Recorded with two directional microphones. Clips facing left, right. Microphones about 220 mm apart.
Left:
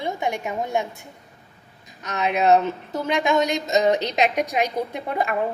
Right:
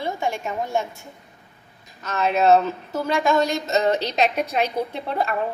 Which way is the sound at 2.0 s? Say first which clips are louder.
Right 2 dB; 15° left (ahead or behind).